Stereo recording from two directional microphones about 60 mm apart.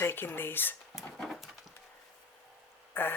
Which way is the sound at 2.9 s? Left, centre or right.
Left.